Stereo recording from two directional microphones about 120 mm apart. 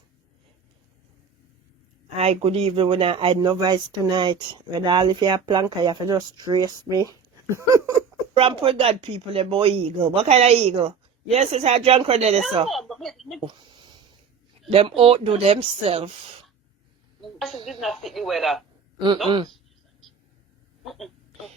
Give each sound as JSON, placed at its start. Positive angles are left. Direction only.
{"t": 2.1, "sound": "speech", "side_deg": -60}
{"t": 8.4, "sound": "speech", "side_deg": -50}
{"t": 12.6, "sound": "speech", "side_deg": 0}
{"t": 13.4, "sound": "a sound", "side_deg": -40}
{"t": 14.7, "sound": "speech", "side_deg": -55}
{"t": 17.2, "sound": "a sound", "side_deg": 0}
{"t": 17.7, "sound": "speech", "side_deg": 0}
{"t": 18.9, "sound": "speech", "side_deg": -40}
{"t": 20.8, "sound": "a sound", "side_deg": 0}